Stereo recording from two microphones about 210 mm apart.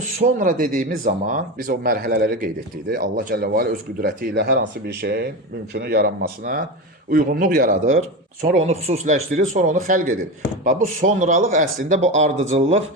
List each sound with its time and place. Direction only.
0.2 s speech: 40° right (ahead or behind)